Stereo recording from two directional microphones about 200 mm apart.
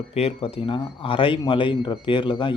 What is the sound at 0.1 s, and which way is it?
Speech, 30° left (ahead or behind).